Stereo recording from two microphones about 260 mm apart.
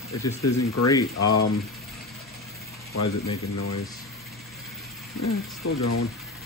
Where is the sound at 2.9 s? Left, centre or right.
Left.